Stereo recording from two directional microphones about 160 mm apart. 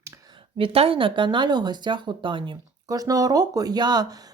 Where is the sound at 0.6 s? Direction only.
35° right (ahead or behind).